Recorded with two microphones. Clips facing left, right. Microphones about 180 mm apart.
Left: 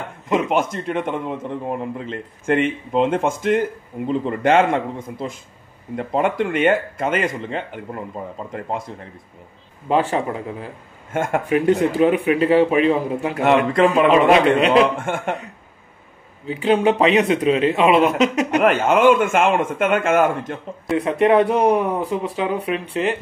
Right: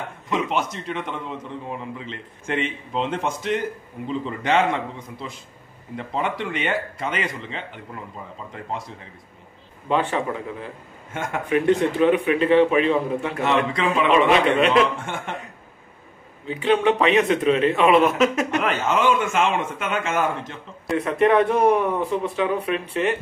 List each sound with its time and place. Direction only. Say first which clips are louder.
0.3 s a man's voice: left 5 dB; 50° left (ahead or behind)
9.8 s a man's voice: left 3 dB; 35° left (ahead or behind)
11.1 s a man's voice: left 7 dB; 50° left (ahead or behind)
11.4 s a man's voice: even; 30° left (ahead or behind)
13.4 s a man's voice: left 8 dB; 50° left (ahead or behind)
16.6 s a man's voice: left 3 dB; 35° left (ahead or behind)
18.6 s a man's voice: left 8 dB; 55° left (ahead or behind)
21.0 s speech: left 2 dB; 30° left (ahead or behind)